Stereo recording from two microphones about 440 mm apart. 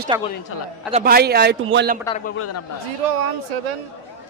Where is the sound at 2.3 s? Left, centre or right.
Left.